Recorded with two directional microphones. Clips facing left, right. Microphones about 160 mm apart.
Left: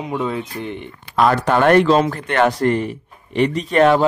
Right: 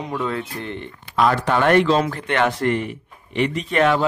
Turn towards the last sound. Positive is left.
turn(degrees=40)  # may be behind; listen again after turning